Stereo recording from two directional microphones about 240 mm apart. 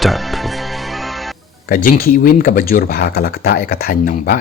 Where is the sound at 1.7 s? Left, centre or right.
Left.